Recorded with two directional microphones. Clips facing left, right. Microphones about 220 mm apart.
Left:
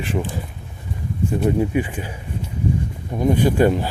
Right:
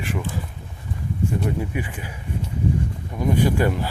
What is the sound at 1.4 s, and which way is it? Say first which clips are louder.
Speech: left 7 dB; 25° left (ahead or behind).